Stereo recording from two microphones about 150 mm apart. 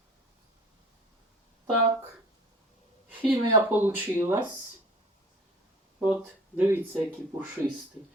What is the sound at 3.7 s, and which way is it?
Speech, 15° right (ahead or behind).